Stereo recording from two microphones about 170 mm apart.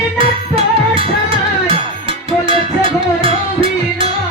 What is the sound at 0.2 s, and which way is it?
Music, 35° right (ahead or behind).